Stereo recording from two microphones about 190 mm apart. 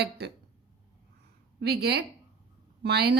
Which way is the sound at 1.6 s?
55° right (ahead or behind).